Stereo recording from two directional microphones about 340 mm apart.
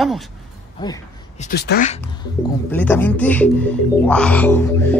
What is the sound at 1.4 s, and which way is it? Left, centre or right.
Speech, left.